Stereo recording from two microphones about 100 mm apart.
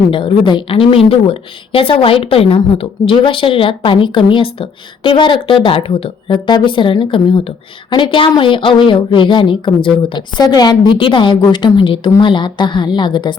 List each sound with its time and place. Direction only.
0.1 s a woman's voice: 55° left (ahead or behind)